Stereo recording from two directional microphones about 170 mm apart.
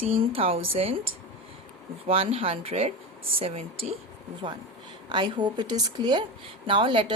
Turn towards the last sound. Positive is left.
turn(degrees=-30)  # may be behind; listen again after turning